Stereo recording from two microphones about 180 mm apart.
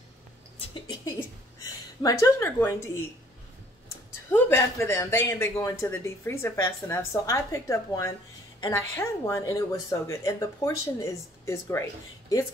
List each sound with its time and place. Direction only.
2.0 s speech: 15° left (ahead or behind)
4.3 s speech: 15° left (ahead or behind)